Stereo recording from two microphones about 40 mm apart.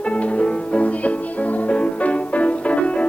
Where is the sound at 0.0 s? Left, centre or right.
Left.